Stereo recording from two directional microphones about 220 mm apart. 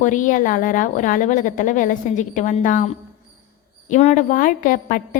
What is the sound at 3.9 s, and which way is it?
A woman's voice, 30° left (ahead or behind).